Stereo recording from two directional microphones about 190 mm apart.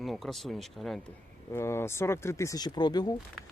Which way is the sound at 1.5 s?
15° left (ahead or behind).